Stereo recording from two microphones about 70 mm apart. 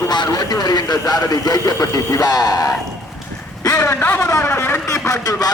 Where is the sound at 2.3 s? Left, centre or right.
Left.